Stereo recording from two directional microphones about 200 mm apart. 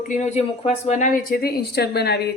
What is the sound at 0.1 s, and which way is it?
A woman's voice, 35° left (ahead or behind).